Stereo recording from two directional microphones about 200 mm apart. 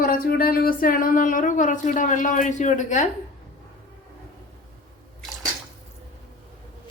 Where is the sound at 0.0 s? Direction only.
45° left (ahead or behind).